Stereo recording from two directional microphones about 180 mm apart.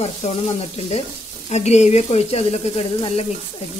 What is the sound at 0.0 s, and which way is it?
Speech, 35° left (ahead or behind).